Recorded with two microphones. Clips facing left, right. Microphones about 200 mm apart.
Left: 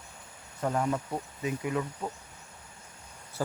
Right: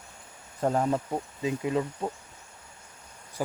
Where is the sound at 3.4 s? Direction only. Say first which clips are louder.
Right 1 dB; 15° right (ahead or behind).